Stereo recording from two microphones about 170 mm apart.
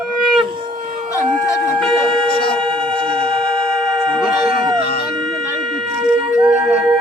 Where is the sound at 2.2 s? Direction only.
60° left (ahead or behind).